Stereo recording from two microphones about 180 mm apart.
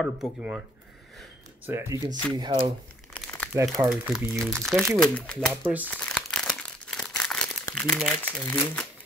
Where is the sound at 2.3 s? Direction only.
25° right (ahead or behind).